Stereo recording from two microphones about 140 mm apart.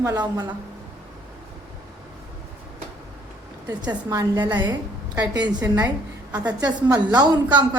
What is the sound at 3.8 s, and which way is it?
Speech, 25° right (ahead or behind).